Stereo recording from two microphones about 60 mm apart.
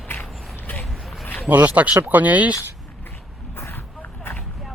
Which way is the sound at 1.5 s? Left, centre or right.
Right.